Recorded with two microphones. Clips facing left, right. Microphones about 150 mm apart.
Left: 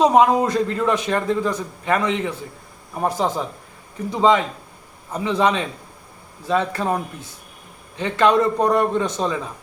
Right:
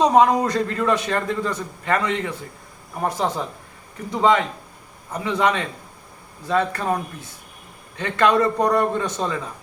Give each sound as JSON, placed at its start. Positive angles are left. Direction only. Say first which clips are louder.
{"t": 0.0, "sound": "a man's voice", "louder": "left 1 dB", "side_deg": 15}